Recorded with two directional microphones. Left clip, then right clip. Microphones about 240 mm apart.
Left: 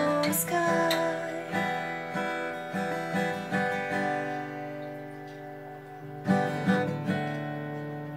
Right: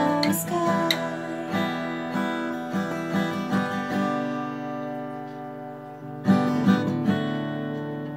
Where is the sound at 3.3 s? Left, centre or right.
Right.